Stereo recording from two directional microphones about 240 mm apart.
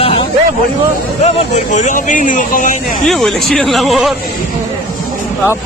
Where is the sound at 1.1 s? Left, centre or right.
Left.